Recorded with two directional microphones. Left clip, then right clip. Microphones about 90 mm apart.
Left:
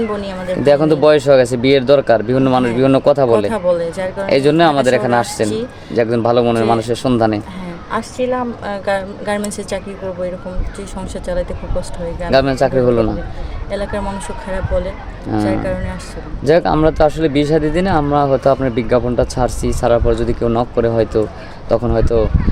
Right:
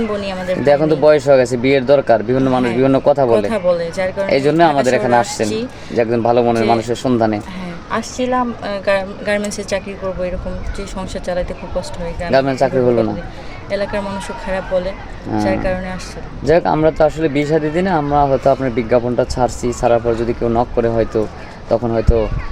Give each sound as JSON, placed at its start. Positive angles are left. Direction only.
{"t": 0.2, "sound": "speech", "side_deg": 40}
{"t": 0.6, "sound": "speech", "side_deg": 50}
{"t": 4.3, "sound": "speech", "side_deg": 50}
{"t": 4.8, "sound": "speech", "side_deg": 40}
{"t": 7.9, "sound": "a woman's voice", "side_deg": 25}
{"t": 8.6, "sound": "speech", "side_deg": 35}
{"t": 12.3, "sound": "speech", "side_deg": 50}
{"t": 13.7, "sound": "speech", "side_deg": 35}
{"t": 16.4, "sound": "speech", "side_deg": 45}